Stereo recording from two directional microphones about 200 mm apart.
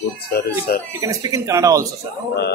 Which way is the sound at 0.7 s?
50° left (ahead or behind).